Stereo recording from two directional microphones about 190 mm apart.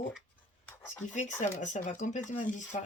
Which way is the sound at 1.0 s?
40° left (ahead or behind).